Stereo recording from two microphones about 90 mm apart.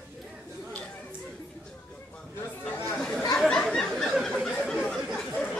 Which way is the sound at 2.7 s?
15° left (ahead or behind).